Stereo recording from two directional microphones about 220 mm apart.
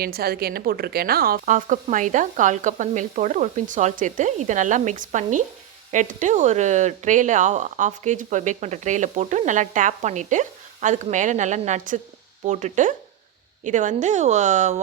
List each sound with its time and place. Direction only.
0.0 s speech: 45° right (ahead or behind)